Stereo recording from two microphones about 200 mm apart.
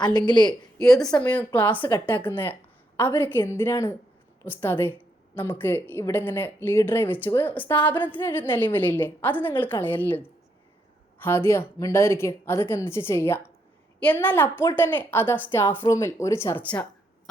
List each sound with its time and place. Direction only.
0.0 s a woman's voice: 20° left (ahead or behind)
0.8 s a woman's voice: centre (ahead or behind)